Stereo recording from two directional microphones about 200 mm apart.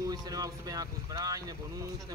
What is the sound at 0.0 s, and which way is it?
Speech, 20° right (ahead or behind).